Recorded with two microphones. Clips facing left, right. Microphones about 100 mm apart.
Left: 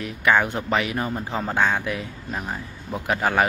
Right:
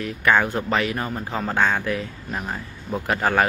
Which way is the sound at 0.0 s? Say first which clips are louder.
Right 1 dB; 15° left (ahead or behind).